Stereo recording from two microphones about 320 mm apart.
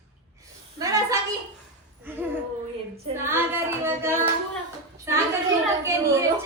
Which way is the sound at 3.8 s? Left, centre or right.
Centre.